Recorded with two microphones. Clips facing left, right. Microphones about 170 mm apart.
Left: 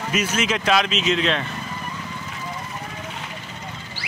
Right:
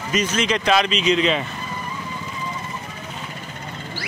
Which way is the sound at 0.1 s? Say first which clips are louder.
Right 2 dB; 5° left (ahead or behind).